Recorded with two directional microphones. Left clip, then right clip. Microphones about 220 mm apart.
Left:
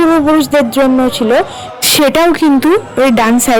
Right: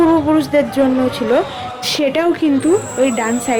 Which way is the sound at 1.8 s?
50° left (ahead or behind).